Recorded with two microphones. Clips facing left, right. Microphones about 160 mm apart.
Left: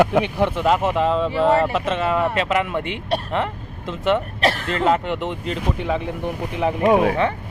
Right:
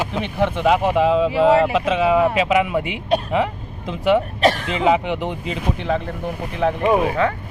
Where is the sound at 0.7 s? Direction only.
10° right (ahead or behind).